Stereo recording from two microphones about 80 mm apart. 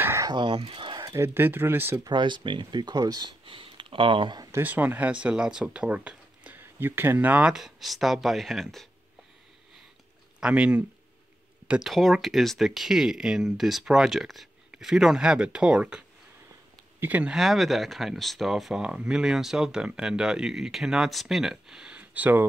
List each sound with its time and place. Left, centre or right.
0.2 s speech: right
1.1 s speech: right
2.0 s speech: right
4.5 s speech: right
7.5 s speech: centre
10.4 s speech: centre
11.6 s a sound: centre
11.9 s speech: centre; by 17.3 s right
17.3 s speech: centre; by 22.5 s right